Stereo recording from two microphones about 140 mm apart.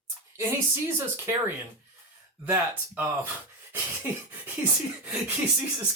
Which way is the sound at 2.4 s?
15° right (ahead or behind).